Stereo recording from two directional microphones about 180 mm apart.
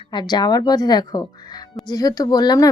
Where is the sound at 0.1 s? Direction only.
25° left (ahead or behind).